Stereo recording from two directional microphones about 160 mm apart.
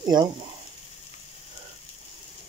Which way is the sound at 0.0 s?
25° right (ahead or behind).